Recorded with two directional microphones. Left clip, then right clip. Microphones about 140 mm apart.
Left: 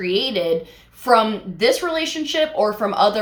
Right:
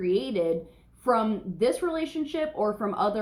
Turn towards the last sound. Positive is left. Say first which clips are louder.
# left 9 dB
turn(degrees=20)  # may be behind; listen again after turning